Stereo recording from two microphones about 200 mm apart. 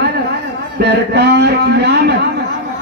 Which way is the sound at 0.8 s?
55° right (ahead or behind).